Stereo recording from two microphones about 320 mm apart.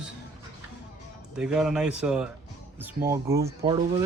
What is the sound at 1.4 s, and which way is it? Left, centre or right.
Speech, centre.